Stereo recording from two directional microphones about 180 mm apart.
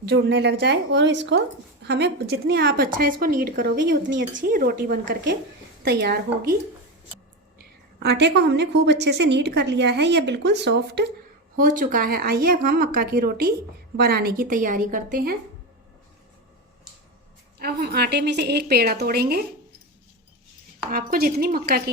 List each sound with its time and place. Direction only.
0.0 s speech: 70° right (ahead or behind); by 3.7 s 55° right (ahead or behind)
3.8 s speech: 85° right; by 6.6 s 60° right (ahead or behind)
7.9 s speech: 70° right (ahead or behind)
11.5 s a woman's voice: 50° right (ahead or behind)
17.6 s speech: 60° right (ahead or behind)
20.8 s speech: 55° right (ahead or behind)